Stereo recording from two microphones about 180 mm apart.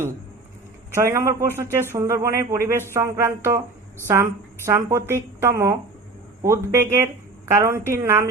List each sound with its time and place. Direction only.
0.9 s a woman's voice: 15° right (ahead or behind)